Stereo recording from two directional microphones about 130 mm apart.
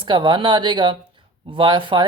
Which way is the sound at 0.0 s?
35° right (ahead or behind).